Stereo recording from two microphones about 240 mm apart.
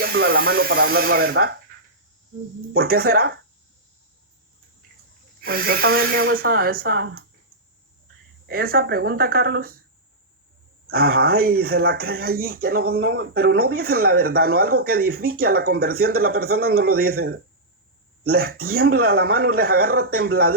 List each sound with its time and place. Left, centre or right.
0.0 s speech: right
2.7 s speech: right
5.4 s speech: right
8.4 s speech: right
10.8 s speech: right